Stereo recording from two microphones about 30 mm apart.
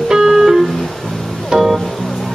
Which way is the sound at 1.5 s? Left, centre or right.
Right.